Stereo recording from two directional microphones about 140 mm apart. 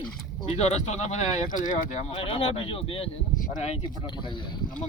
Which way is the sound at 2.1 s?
40° left (ahead or behind).